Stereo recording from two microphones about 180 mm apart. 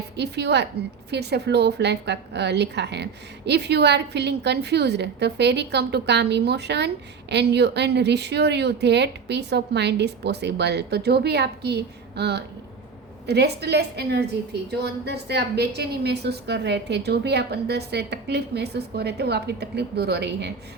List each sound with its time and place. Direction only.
0.2 s a woman's voice: 70° right (ahead or behind)